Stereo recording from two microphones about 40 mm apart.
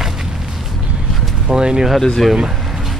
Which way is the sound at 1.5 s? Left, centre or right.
Right.